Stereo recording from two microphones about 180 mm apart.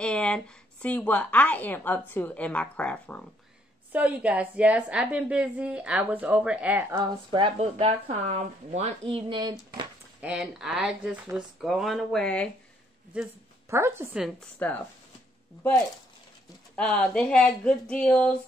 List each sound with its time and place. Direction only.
0.0 s a sound: 5° left (ahead or behind)
0.8 s a woman's voice: 10° left (ahead or behind)
3.9 s a woman's voice: 10° right (ahead or behind)
7.0 s speech: 25° right (ahead or behind)
10.2 s speech: 5° right (ahead or behind)
13.1 s a woman's voice: 10° right (ahead or behind)
14.6 s a woman's voice: 5° left (ahead or behind)
16.7 s a woman's voice: 5° left (ahead or behind)